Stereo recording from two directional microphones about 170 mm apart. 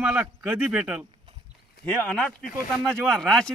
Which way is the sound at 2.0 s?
5° left (ahead or behind).